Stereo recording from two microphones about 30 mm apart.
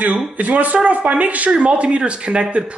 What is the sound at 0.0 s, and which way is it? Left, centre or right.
Speech, right.